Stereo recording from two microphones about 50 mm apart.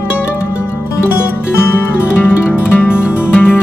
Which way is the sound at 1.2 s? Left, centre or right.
Left.